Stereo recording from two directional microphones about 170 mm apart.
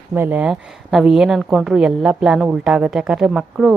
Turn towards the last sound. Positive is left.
turn(degrees=-5)  # may be behind; listen again after turning